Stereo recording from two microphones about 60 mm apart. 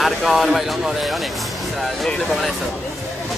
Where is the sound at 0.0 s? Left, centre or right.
Centre.